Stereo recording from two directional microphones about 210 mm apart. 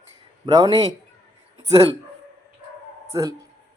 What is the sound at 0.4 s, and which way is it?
Speech, 20° right (ahead or behind).